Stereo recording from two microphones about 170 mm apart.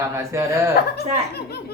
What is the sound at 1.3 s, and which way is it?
Speech, 70° left (ahead or behind).